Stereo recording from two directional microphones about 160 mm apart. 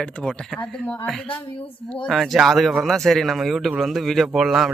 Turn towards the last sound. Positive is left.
turn(degrees=0)  # may be behind; listen again after turning